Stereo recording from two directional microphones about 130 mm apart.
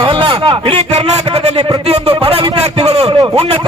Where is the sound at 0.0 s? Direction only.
40° right (ahead or behind).